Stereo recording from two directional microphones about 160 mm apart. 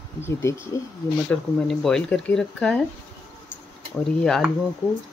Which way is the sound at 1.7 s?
5° left (ahead or behind).